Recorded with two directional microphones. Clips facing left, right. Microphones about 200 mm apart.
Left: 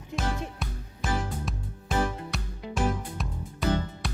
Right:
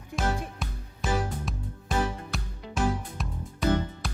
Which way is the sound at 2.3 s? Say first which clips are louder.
Even; centre (ahead or behind).